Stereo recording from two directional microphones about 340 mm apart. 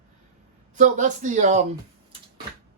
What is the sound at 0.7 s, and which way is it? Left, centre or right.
Speech, right.